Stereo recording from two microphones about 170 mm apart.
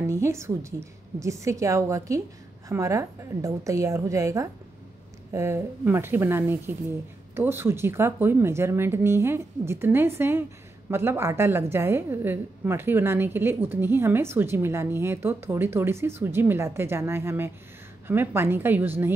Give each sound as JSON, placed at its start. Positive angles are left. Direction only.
{"t": 0.0, "sound": "a woman's voice", "side_deg": -15}